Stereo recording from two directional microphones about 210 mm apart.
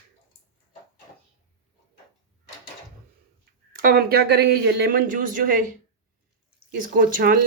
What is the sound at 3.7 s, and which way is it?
Speech, 45° right (ahead or behind).